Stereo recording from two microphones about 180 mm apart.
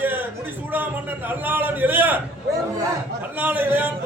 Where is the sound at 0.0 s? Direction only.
10° right (ahead or behind).